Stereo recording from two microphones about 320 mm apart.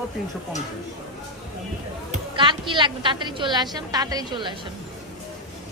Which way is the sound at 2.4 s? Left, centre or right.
Centre.